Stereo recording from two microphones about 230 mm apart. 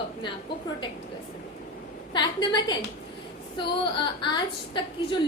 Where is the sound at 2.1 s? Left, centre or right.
Centre.